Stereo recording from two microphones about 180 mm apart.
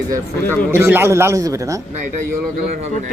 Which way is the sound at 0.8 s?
15° right (ahead or behind).